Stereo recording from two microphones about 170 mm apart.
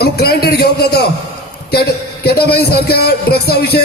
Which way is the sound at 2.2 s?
70° left (ahead or behind).